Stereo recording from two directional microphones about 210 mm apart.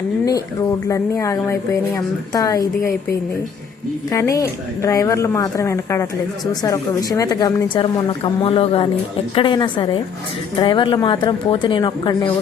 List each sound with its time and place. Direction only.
0.3 s a woman's voice: 15° left (ahead or behind)